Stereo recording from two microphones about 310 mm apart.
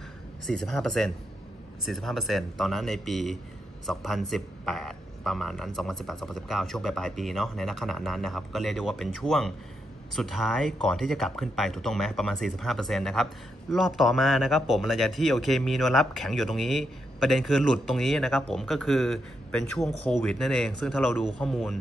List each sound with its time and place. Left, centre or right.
0.5 s a man's voice: centre